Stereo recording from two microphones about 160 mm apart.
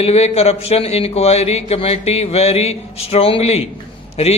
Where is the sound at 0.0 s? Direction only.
40° left (ahead or behind).